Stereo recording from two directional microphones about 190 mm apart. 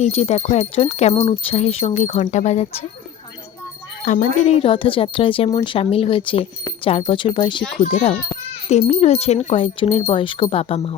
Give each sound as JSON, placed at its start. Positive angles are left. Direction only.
{"t": 0.0, "sound": "a child's voice", "side_deg": 35}
{"t": 4.0, "sound": "a woman's voice", "side_deg": 40}